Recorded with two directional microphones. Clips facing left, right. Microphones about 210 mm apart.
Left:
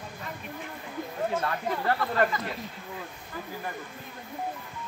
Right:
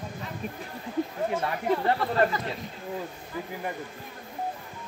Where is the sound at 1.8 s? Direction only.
30° right (ahead or behind).